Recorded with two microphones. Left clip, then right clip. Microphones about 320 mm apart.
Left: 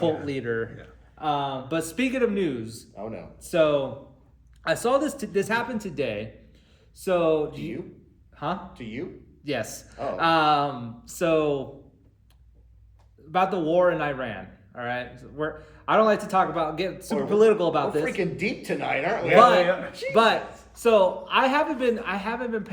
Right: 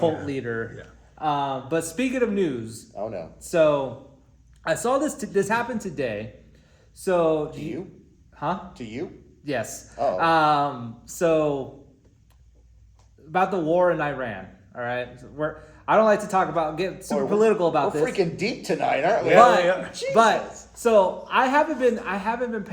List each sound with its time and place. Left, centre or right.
0.3 s a man's voice: centre
2.9 s speech: right
3.4 s a man's voice: centre
8.8 s speech: right
9.4 s a man's voice: centre
13.3 s a man's voice: centre
18.0 s speech: right
19.4 s a man's voice: centre
19.6 s speech: right
20.1 s a man's voice: centre